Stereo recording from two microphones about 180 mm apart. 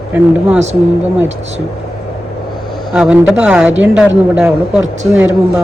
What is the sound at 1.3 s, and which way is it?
Speech, 40° right (ahead or behind).